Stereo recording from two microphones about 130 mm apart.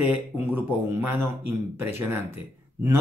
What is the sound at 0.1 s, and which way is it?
Speech, 15° right (ahead or behind).